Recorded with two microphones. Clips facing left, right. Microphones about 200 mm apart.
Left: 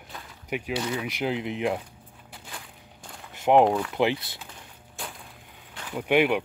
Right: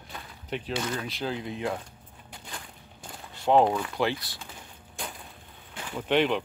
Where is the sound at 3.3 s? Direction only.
15° left (ahead or behind).